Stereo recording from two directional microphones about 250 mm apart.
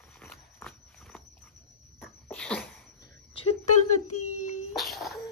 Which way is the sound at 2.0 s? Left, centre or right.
Centre.